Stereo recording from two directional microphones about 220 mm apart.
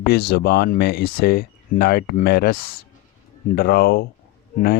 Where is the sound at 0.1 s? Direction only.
50° left (ahead or behind).